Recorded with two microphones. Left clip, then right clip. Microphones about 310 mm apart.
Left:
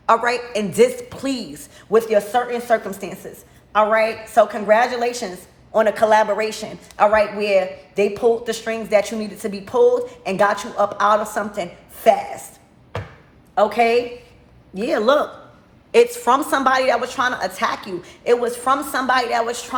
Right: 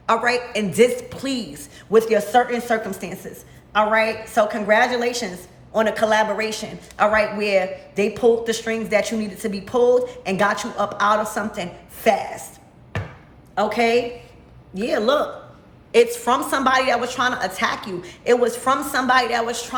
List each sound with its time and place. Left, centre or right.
0.0 s a man's voice: centre
13.6 s a man's voice: centre